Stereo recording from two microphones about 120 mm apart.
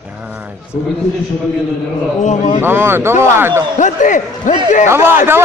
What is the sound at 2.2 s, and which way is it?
Speech, 80° left.